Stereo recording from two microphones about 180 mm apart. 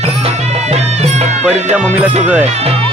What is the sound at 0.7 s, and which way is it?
Music, 35° right (ahead or behind).